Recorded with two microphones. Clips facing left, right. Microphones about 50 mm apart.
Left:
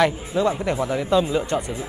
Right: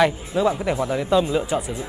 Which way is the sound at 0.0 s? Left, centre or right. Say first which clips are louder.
Right 1 dB; centre.